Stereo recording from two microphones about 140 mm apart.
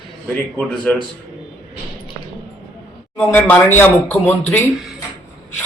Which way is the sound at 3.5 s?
15° left (ahead or behind).